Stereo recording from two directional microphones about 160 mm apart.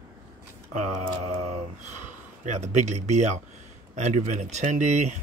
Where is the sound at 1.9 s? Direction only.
45° right (ahead or behind).